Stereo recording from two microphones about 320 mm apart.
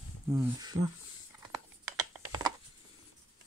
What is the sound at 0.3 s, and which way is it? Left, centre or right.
Speech, centre.